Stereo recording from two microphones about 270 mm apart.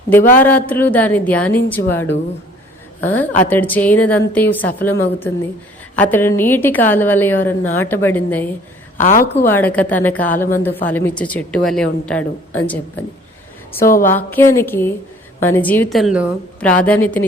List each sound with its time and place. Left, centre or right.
0.3 s a woman's voice: centre
9.0 s a woman's voice: left
9.5 s a woman's voice: centre
13.7 s a woman's voice: left
14.2 s a woman's voice: centre